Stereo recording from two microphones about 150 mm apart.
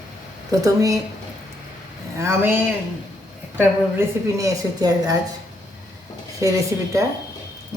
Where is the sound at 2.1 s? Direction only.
20° right (ahead or behind).